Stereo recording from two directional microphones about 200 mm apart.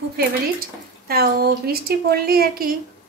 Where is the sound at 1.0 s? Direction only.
50° right (ahead or behind).